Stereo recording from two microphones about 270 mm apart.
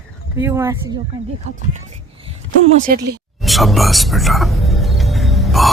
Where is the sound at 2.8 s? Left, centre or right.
Right.